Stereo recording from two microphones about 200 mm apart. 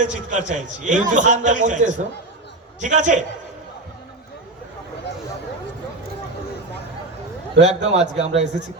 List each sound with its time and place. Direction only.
0.0 s a man's voice: 40° right (ahead or behind)
7.6 s a man's voice: 35° right (ahead or behind)